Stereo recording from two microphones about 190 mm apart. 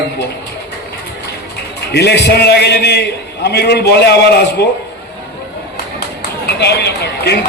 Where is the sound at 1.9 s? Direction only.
60° left (ahead or behind).